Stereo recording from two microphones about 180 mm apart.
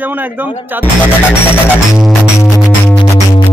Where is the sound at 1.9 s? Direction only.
Centre (ahead or behind).